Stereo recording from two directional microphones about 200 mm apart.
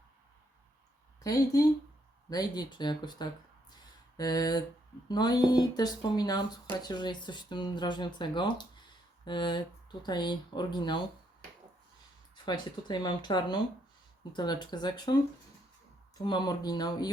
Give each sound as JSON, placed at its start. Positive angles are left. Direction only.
{"t": 1.2, "sound": "speech", "side_deg": 20}
{"t": 12.5, "sound": "speech", "side_deg": 20}